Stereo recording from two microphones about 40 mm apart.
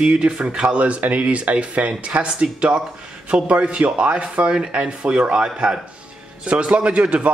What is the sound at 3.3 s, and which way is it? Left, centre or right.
Speech, right.